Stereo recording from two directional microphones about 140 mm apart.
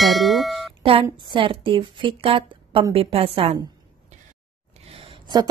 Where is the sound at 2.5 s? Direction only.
40° right (ahead or behind).